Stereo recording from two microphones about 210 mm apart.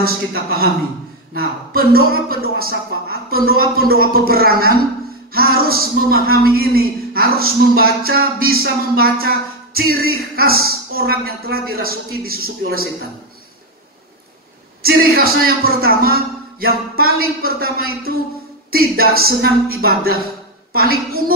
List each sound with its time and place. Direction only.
0.0 s a woman's voice: 45° right (ahead or behind)
14.8 s a woman's voice: 45° right (ahead or behind)